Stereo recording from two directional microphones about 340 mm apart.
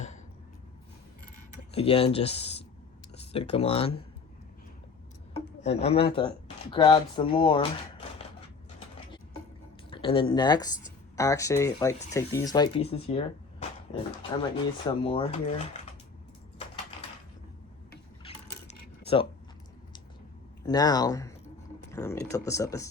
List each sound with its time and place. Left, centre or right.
1.7 s speech: centre
5.6 s speech: centre
9.9 s speech: centre
19.0 s speech: centre
20.7 s speech: centre